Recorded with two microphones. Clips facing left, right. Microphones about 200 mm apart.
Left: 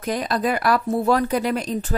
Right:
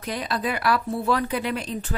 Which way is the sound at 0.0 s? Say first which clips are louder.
Left 5 dB; 45° left (ahead or behind).